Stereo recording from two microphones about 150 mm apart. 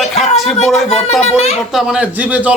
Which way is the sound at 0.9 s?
45° left (ahead or behind).